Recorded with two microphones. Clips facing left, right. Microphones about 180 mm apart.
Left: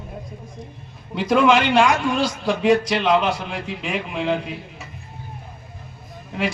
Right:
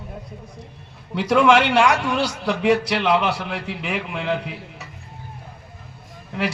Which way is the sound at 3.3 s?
70° right (ahead or behind).